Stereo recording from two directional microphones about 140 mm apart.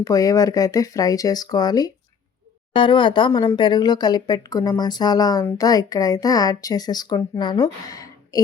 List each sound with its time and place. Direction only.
0.0 s a woman's voice: 25° left (ahead or behind)